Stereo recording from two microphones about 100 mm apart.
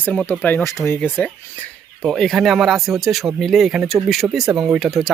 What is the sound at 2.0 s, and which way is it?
Speech, 5° left (ahead or behind).